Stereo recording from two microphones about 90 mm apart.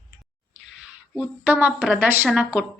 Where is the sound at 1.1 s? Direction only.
15° right (ahead or behind).